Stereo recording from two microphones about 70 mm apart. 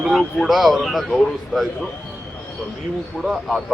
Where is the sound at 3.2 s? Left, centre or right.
Centre.